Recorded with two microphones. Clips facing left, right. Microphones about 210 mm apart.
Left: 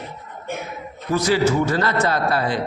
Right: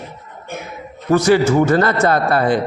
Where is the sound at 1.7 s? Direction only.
50° right (ahead or behind).